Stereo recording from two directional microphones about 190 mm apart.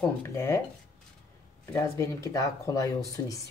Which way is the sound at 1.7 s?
15° left (ahead or behind).